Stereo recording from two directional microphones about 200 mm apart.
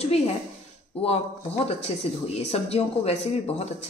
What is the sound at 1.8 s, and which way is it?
Speech, 30° left (ahead or behind).